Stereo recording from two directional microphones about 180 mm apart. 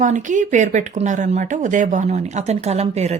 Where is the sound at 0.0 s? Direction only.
45° right (ahead or behind).